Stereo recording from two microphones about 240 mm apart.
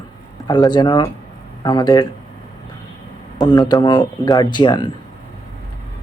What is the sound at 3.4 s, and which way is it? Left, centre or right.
Speech, centre.